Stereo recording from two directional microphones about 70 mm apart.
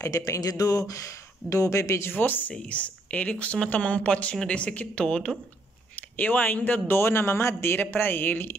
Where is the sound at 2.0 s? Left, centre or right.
Left.